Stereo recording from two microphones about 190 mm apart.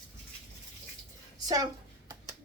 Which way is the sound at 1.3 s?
20° right (ahead or behind).